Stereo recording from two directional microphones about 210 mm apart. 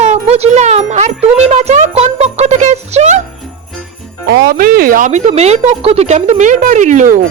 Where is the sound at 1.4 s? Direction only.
30° right (ahead or behind).